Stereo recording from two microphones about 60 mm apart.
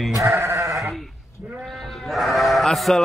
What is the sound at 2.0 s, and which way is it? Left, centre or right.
Sheep, centre.